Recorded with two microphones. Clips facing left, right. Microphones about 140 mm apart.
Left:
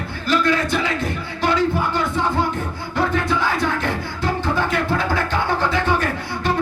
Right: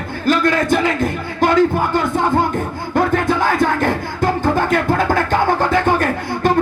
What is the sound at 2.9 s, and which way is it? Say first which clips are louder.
Music: right 5 dB; 50° right (ahead or behind).